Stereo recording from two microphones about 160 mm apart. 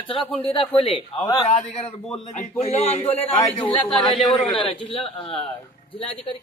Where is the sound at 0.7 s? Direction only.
35° left (ahead or behind).